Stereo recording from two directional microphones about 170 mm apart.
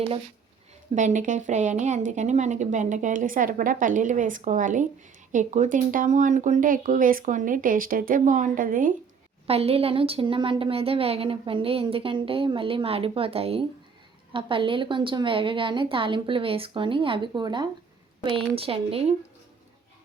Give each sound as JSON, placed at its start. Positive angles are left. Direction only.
{"t": 0.9, "sound": "speech", "side_deg": -45}
{"t": 9.5, "sound": "a woman's voice", "side_deg": -35}